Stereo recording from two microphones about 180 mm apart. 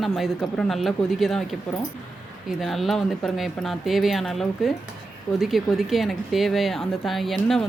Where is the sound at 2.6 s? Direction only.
Centre (ahead or behind).